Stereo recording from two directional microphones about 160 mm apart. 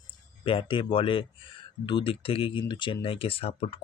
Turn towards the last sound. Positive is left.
turn(degrees=35)  # may be behind; listen again after turning